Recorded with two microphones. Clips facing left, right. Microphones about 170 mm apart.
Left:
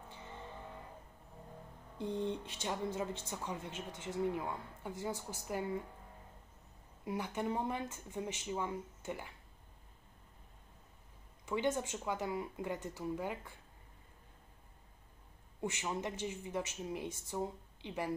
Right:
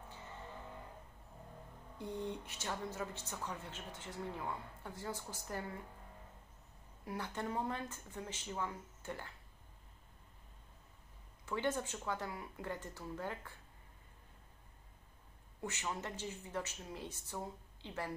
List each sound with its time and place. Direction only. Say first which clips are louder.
2.0 s a woman's voice: left 5 dB; 20° left (ahead or behind)
7.1 s a woman's voice: left 4 dB; 15° left (ahead or behind)
11.4 s a woman's voice: left 3 dB; 15° left (ahead or behind)
15.6 s a woman's voice: left 4 dB; 15° left (ahead or behind)